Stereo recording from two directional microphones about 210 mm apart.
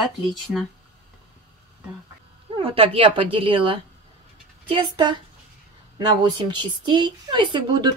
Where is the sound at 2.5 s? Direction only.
25° right (ahead or behind).